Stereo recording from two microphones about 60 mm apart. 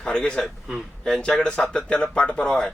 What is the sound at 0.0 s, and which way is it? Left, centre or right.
A man's voice, centre.